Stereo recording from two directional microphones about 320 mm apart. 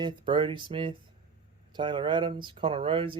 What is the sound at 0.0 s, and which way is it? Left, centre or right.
Speech, centre.